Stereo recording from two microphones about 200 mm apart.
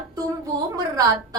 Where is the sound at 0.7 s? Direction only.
20° right (ahead or behind).